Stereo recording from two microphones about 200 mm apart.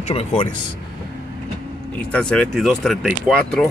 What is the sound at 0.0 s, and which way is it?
Speech, 30° left (ahead or behind).